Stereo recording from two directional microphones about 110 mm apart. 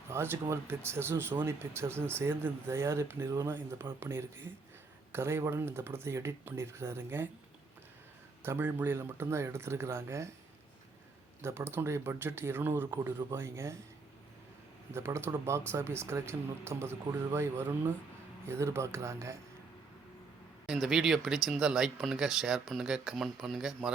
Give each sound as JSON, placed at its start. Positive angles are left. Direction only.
{"t": 0.1, "sound": "speech", "side_deg": -25}
{"t": 8.4, "sound": "speech", "side_deg": -20}
{"t": 11.4, "sound": "speech", "side_deg": -20}
{"t": 14.9, "sound": "speech", "side_deg": -20}
{"t": 20.7, "sound": "speech", "side_deg": -5}